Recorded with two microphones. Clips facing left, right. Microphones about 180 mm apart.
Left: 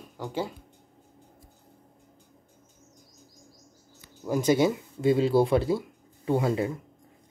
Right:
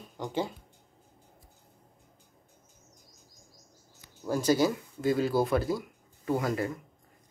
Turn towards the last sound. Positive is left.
turn(degrees=25)  # may be behind; listen again after turning